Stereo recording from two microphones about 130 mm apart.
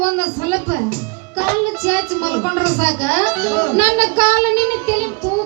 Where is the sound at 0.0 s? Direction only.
20° left (ahead or behind).